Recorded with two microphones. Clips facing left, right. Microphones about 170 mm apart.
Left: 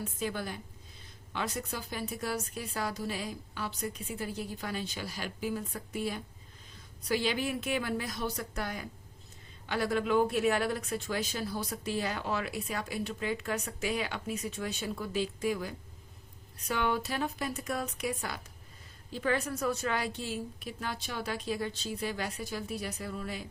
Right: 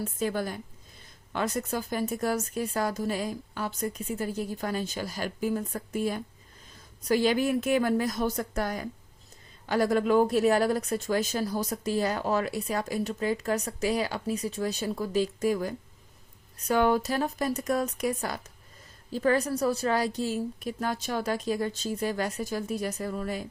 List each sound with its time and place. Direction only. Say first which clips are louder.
0.0 s speech: right 6 dB; 45° right (ahead or behind)